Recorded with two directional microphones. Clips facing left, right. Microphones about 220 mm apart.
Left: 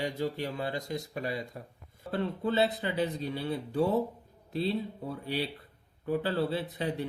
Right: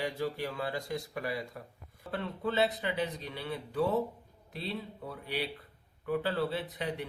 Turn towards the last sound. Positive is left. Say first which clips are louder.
# left 3 dB
turn(degrees=30)  # may be behind; listen again after turning